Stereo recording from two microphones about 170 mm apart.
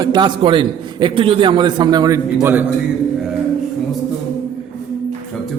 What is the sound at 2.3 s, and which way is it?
Speech, 10° right (ahead or behind).